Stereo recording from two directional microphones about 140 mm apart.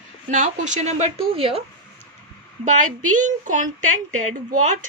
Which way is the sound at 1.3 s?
45° right (ahead or behind).